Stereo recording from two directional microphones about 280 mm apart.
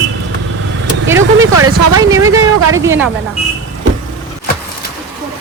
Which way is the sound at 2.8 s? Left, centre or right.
Centre.